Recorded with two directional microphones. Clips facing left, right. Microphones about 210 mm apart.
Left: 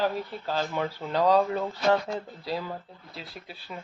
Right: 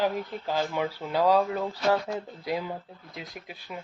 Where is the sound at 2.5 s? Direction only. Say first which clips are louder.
Right 2 dB; 15° right (ahead or behind).